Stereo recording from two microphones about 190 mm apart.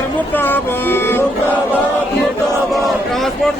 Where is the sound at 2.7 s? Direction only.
Centre (ahead or behind).